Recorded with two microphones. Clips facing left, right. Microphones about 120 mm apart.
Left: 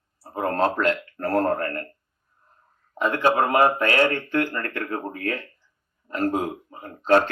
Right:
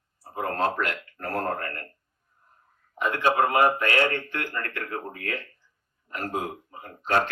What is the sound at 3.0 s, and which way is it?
A man's voice, 35° left (ahead or behind).